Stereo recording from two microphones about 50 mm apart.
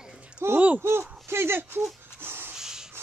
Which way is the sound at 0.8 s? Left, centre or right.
Right.